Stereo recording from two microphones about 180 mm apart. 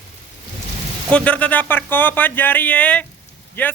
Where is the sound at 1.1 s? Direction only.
5° left (ahead or behind).